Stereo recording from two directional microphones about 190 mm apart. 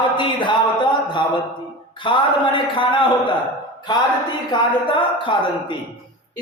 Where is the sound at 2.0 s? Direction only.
25° left (ahead or behind).